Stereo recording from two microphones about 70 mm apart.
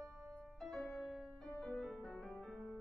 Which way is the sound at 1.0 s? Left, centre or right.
Centre.